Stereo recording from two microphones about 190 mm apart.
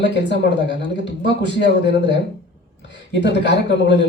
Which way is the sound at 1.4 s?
65° left (ahead or behind).